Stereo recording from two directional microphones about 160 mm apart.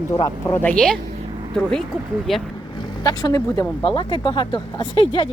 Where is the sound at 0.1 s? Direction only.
15° left (ahead or behind).